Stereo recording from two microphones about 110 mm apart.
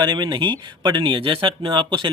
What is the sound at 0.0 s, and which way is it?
Speech, 40° right (ahead or behind).